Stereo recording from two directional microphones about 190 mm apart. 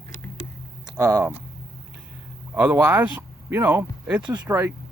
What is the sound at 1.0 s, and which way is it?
Speech, 15° right (ahead or behind).